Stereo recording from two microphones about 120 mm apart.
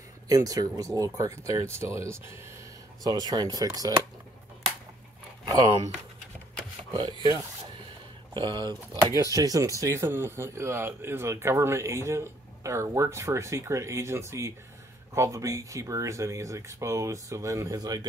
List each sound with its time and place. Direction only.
0.3 s speech: 30° right (ahead or behind)
5.4 s a sound: 35° right (ahead or behind)
7.0 s speech: 35° right (ahead or behind)
9.2 s speech: 30° right (ahead or behind)